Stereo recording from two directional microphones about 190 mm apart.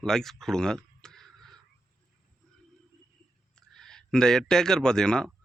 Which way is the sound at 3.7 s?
5° left (ahead or behind).